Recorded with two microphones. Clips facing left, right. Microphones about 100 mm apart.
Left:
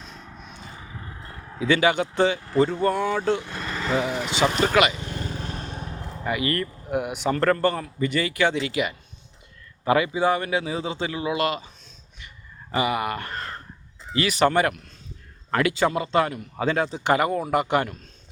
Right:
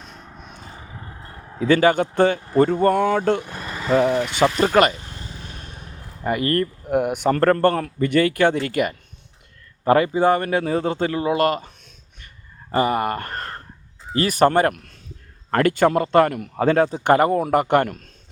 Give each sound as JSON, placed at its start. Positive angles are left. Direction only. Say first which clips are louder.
{"t": 0.0, "sound": "vehicle", "louder": "right 1 dB", "side_deg": -45}
{"t": 1.5, "sound": "speech", "louder": "right 4 dB", "side_deg": -45}
{"t": 3.4, "sound": "vehicle", "louder": "right 1 dB", "side_deg": -15}
{"t": 3.9, "sound": "speech", "louder": "right 8 dB", "side_deg": -50}
{"t": 5.1, "sound": "vehicle", "louder": "left 6 dB", "side_deg": 55}
{"t": 5.5, "sound": "vehicle", "louder": "left 6 dB", "side_deg": 40}
{"t": 6.2, "sound": "speech", "louder": "right 5 dB", "side_deg": -45}
{"t": 12.7, "sound": "speech", "louder": "right 4 dB", "side_deg": -40}